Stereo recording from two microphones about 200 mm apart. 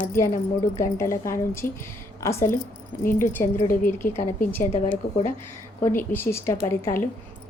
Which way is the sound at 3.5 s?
40° left (ahead or behind).